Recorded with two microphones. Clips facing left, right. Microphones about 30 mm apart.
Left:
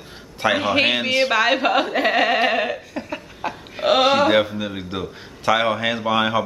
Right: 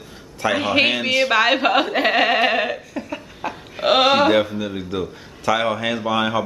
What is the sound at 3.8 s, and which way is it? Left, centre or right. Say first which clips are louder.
Speech: right 1 dB; centre.